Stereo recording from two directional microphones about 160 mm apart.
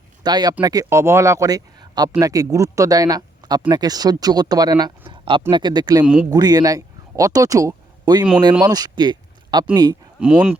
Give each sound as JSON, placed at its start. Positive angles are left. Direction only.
{"t": 0.2, "sound": "speech", "side_deg": -25}
{"t": 10.2, "sound": "speech", "side_deg": -5}